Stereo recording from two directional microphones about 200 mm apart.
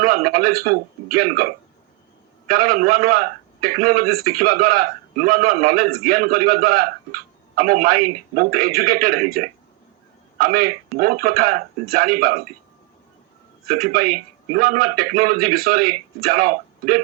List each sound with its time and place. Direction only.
0.0 s a man's voice: 45° right (ahead or behind)
2.5 s a man's voice: 45° right (ahead or behind)
13.7 s a man's voice: 50° right (ahead or behind)